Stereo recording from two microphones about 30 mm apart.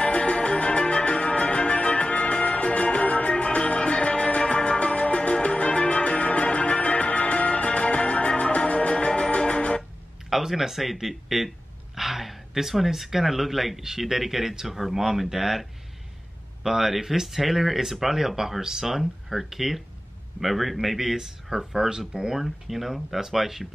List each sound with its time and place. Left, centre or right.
0.0 s music: left
10.4 s speech: centre
16.6 s speech: centre
21.5 s speech: centre
22.4 s speech: centre